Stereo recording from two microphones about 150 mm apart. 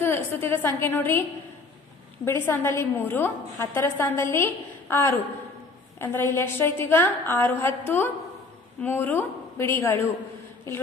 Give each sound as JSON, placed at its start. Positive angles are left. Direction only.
{"t": 0.0, "sound": "a woman's voice", "side_deg": 15}
{"t": 2.2, "sound": "a woman's voice", "side_deg": 15}